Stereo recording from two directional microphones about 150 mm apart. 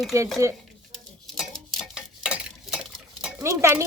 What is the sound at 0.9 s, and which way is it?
Stir, centre (ahead or behind).